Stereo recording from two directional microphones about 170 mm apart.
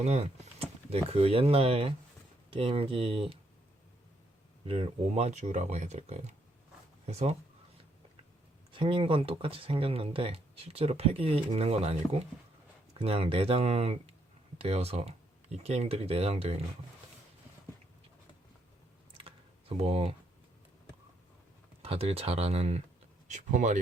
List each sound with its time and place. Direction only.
0.0 s speech: 35° right (ahead or behind)
4.6 s speech: 35° right (ahead or behind)
8.7 s speech: 30° right (ahead or behind)
13.0 s speech: 35° right (ahead or behind)
19.1 s typing: 35° right (ahead or behind)
21.8 s speech: 35° right (ahead or behind)